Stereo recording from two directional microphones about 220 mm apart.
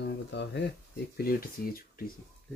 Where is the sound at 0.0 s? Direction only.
55° left (ahead or behind).